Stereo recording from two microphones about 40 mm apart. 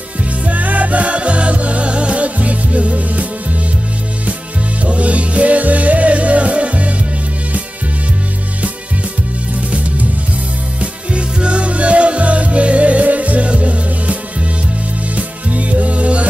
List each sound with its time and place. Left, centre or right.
0.5 s music: right
4.8 s music: right
10.8 s music: right
15.1 s music: right